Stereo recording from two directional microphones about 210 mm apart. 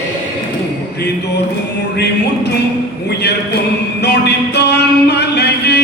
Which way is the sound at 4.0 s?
50° left (ahead or behind).